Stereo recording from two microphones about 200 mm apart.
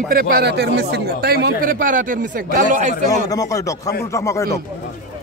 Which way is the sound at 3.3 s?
15° left (ahead or behind).